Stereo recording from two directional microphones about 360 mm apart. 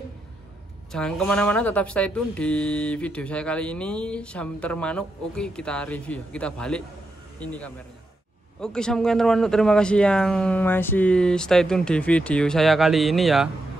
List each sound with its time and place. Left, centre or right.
0.9 s speech: centre